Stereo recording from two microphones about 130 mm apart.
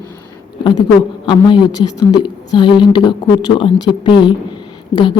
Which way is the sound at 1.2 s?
35° left (ahead or behind).